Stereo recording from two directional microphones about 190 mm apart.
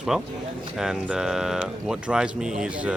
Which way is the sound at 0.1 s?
5° right (ahead or behind).